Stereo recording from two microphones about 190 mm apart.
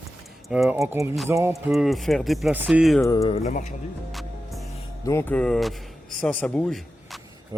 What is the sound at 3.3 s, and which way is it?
Speech, 40° left (ahead or behind).